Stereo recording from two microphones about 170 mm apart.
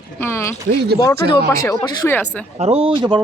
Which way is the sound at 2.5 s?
35° right (ahead or behind).